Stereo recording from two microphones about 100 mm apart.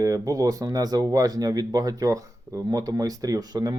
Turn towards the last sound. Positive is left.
turn(degrees=-40)  # may be behind; listen again after turning